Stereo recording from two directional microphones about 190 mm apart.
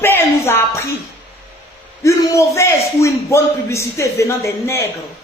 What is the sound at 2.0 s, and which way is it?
A man's voice, 15° left (ahead or behind).